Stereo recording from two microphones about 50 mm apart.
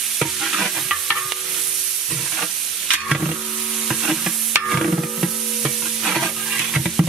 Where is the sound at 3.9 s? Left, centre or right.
Centre.